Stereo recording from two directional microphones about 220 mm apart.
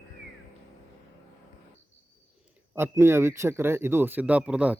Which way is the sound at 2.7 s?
10° right (ahead or behind).